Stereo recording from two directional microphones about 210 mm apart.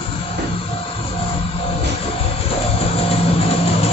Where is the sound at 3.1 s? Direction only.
25° left (ahead or behind).